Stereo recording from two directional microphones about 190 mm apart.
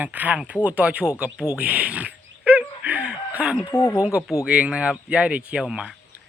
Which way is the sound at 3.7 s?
15° left (ahead or behind).